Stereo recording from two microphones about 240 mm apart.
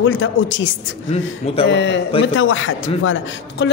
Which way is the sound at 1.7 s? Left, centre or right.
Left.